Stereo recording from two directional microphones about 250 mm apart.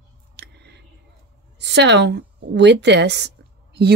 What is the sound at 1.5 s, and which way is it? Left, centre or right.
A woman's voice, right.